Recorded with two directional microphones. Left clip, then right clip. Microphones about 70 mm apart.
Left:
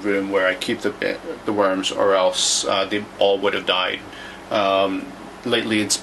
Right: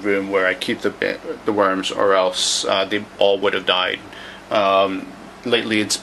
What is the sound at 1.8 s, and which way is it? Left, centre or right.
Speech, right.